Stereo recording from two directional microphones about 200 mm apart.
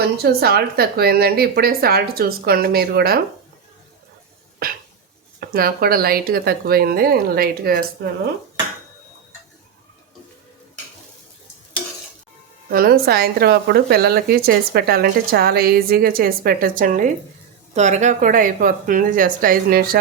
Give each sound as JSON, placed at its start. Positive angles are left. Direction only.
{"t": 0.0, "sound": "speech", "side_deg": -50}
{"t": 4.6, "sound": "a sound", "side_deg": -50}
{"t": 5.4, "sound": "speech", "side_deg": -45}
{"t": 12.6, "sound": "speech", "side_deg": -45}